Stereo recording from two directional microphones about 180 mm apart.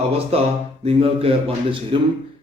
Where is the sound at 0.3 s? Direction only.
35° right (ahead or behind).